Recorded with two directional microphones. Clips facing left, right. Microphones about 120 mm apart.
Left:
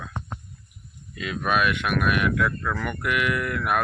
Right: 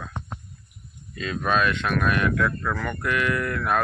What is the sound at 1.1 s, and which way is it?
Speech, 10° left (ahead or behind).